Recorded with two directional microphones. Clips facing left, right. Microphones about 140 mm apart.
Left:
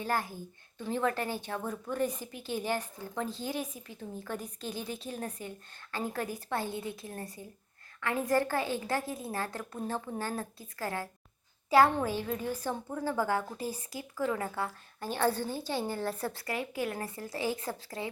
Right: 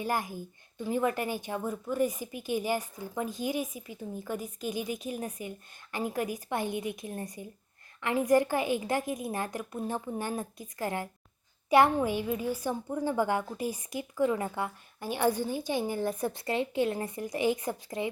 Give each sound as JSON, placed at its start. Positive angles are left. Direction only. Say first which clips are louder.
{"t": 0.0, "sound": "a woman's voice", "louder": "right 1 dB", "side_deg": -15}